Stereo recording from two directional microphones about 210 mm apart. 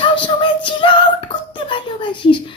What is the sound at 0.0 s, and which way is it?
Child singing, 25° left (ahead or behind).